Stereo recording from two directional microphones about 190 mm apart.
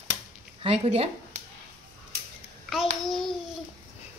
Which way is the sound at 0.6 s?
30° right (ahead or behind).